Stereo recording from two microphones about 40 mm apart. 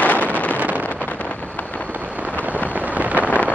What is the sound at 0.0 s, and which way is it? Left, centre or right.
Wind noise, left.